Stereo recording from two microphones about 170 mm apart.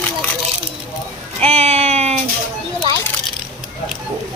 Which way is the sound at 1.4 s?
40° right (ahead or behind).